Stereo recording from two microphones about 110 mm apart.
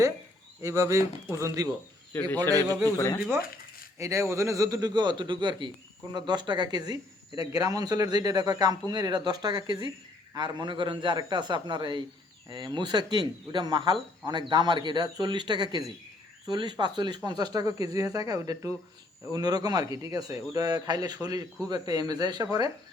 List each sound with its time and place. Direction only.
0.6 s a man's voice: 25° right (ahead or behind)
2.8 s speech: 25° left (ahead or behind)
3.9 s a man's voice: 25° right (ahead or behind)